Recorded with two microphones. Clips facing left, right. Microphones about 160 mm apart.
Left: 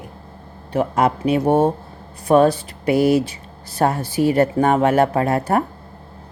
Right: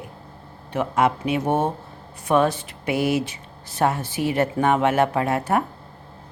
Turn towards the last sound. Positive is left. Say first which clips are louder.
# left 3 dB
turn(degrees=40)  # may be behind; listen again after turning